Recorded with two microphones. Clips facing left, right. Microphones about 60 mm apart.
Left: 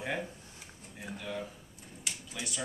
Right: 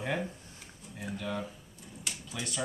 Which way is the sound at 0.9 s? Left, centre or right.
Centre.